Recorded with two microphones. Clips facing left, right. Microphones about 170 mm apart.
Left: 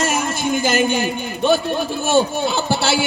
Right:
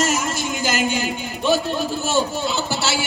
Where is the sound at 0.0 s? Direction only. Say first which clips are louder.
Left 2 dB; 55° left (ahead or behind).